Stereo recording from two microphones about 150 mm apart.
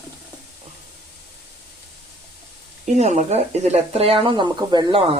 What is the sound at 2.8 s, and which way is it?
Speech, 50° right (ahead or behind).